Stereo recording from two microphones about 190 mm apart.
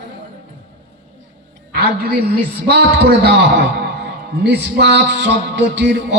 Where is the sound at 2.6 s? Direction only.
55° right (ahead or behind).